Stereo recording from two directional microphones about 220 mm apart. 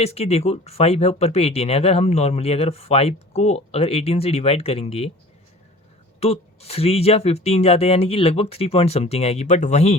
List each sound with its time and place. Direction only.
0.0 s speech: 30° left (ahead or behind)
6.1 s speech: 30° left (ahead or behind)